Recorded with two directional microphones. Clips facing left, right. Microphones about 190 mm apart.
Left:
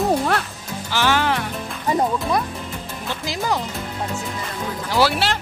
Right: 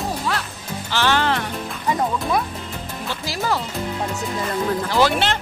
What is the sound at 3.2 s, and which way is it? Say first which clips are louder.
Speech: even; 15° left (ahead or behind).